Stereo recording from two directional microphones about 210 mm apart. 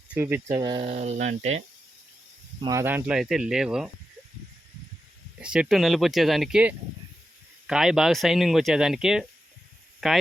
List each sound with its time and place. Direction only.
0.1 s speech: 10° right (ahead or behind); by 1.6 s 30° right (ahead or behind)
2.6 s speech: 15° right (ahead or behind)
5.4 s speech: 5° right (ahead or behind)